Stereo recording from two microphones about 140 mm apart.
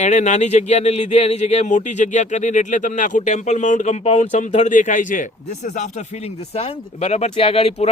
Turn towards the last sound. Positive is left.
turn(degrees=45)  # may be behind; listen again after turning